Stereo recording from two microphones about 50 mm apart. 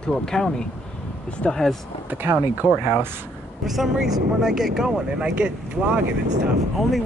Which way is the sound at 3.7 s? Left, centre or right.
Centre.